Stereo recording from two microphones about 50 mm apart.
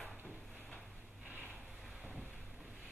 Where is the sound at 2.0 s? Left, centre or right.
Centre.